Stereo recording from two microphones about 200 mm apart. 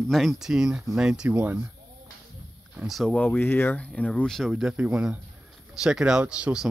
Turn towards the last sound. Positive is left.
turn(degrees=-5)  # may be behind; listen again after turning